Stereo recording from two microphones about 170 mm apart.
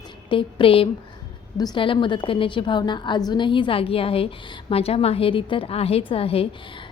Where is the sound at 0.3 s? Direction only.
30° left (ahead or behind).